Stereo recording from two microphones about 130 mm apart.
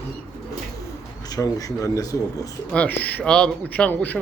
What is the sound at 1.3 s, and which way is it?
Speech, 25° left (ahead or behind).